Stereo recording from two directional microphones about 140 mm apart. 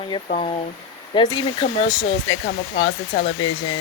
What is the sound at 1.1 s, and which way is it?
Speech, 35° left (ahead or behind).